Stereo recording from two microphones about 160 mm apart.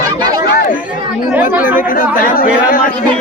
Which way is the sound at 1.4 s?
60° left (ahead or behind).